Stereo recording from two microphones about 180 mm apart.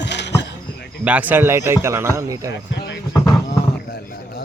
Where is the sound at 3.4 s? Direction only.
60° left (ahead or behind).